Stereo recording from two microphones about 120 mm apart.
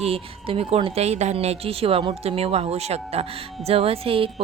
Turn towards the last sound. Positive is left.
turn(degrees=-50)  # may be behind; listen again after turning